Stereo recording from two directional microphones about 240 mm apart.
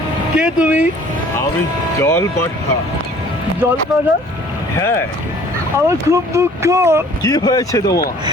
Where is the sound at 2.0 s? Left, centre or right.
Centre.